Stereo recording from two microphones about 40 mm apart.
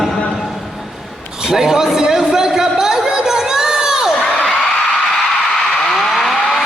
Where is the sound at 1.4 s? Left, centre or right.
Centre.